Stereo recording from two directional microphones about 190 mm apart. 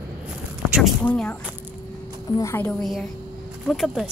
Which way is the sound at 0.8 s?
Centre (ahead or behind).